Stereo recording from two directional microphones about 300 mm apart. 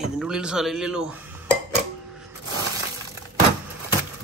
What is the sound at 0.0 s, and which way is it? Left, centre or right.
Speech, centre.